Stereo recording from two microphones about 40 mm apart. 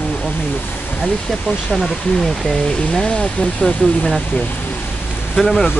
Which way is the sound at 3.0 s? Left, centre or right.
Left.